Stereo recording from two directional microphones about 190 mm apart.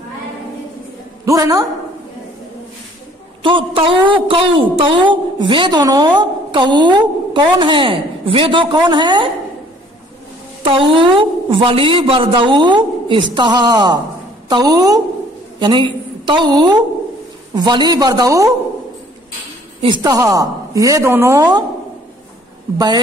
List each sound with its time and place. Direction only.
1.2 s a woman's voice: 20° right (ahead or behind)
3.4 s a woman's voice: 25° right (ahead or behind)
10.6 s a woman's voice: 30° right (ahead or behind)
19.8 s a woman's voice: 20° right (ahead or behind)